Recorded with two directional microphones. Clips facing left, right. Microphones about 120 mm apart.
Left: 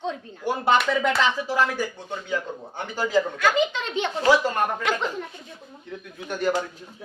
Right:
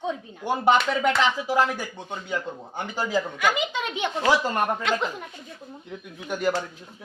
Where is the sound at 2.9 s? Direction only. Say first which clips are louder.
Left 4 dB; 15° right (ahead or behind).